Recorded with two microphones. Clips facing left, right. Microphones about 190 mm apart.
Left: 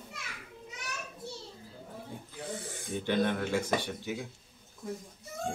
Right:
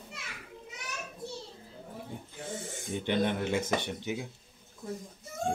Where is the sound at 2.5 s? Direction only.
25° right (ahead or behind).